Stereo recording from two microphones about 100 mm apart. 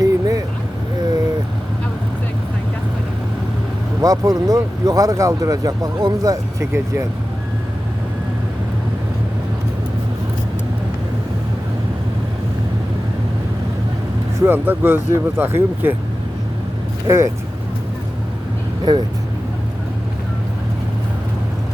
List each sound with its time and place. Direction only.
0.0 s vehicle: 35° right (ahead or behind)
4.0 s speech: 35° right (ahead or behind)
6.6 s speech: 25° right (ahead or behind)
14.4 s speech: 20° right (ahead or behind)
17.1 s speech: 30° right (ahead or behind)
18.9 s speech: 45° right (ahead or behind)